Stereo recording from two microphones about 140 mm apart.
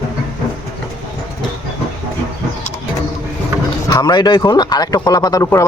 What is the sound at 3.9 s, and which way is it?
Speech, 30° left (ahead or behind).